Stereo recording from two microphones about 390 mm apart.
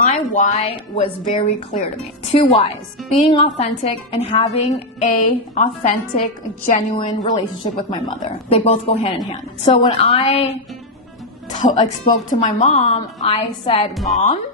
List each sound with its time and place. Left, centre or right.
0.0 s a woman's voice: centre
11.6 s a woman's voice: centre
13.9 s a woman's voice: centre